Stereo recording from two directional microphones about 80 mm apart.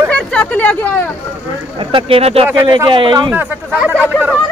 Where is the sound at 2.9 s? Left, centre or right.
Right.